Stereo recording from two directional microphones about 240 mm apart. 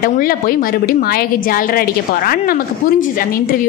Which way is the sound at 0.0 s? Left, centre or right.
Left.